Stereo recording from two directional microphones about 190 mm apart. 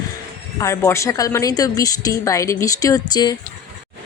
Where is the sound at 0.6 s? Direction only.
15° left (ahead or behind).